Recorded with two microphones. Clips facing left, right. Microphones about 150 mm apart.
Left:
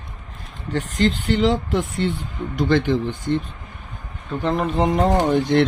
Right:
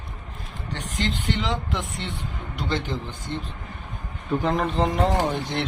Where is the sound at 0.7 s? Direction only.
40° left (ahead or behind).